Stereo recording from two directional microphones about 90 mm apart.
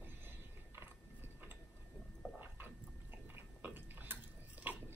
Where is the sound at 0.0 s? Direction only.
25° right (ahead or behind).